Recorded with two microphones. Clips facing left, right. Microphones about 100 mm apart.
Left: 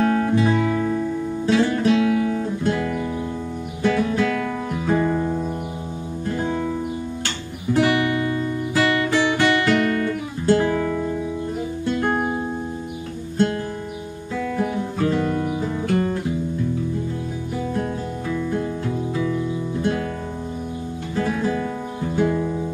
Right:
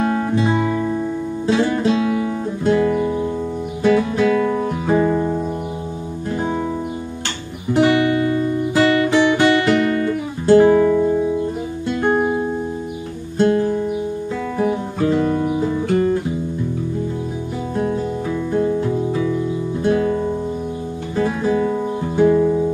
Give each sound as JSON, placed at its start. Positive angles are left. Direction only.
{"t": 0.4, "sound": "music", "side_deg": -25}
{"t": 7.7, "sound": "guitar", "side_deg": -25}
{"t": 11.8, "sound": "music", "side_deg": -15}
{"t": 14.6, "sound": "guitar", "side_deg": -25}
{"t": 18.5, "sound": "music", "side_deg": -20}
{"t": 21.2, "sound": "guitar", "side_deg": -20}
{"t": 22.1, "sound": "music", "side_deg": -20}